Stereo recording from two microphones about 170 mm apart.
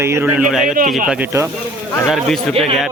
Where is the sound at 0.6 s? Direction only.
55° right (ahead or behind).